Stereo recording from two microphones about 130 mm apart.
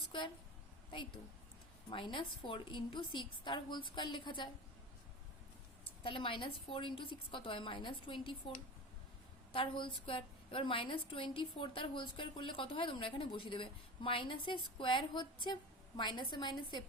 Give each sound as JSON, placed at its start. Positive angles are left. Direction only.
{"t": 0.9, "sound": "a woman's voice", "side_deg": 40}
{"t": 5.8, "sound": "a woman's voice", "side_deg": 40}